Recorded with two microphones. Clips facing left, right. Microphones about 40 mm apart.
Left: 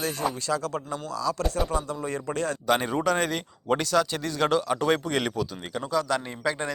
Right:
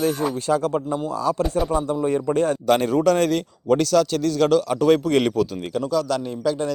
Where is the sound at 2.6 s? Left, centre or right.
Centre.